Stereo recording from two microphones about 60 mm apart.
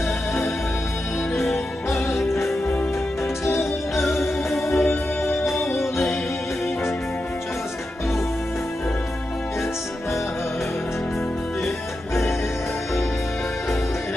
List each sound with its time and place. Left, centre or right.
1.4 s music: centre
3.4 s music: left
4.0 s music: centre